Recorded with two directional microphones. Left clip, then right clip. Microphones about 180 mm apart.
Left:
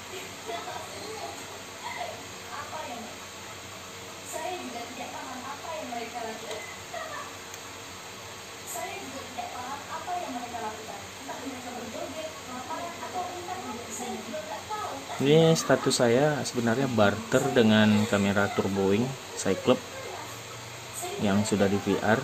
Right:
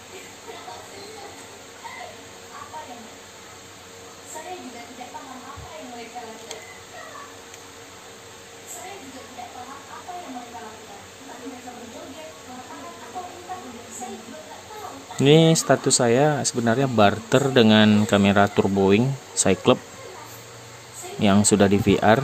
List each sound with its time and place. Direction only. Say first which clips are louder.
15.2 s speech: right 5 dB; 45° right (ahead or behind)
21.2 s speech: right 8 dB; 45° right (ahead or behind)